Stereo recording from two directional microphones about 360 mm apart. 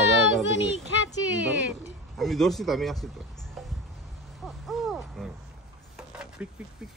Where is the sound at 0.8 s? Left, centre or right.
Centre.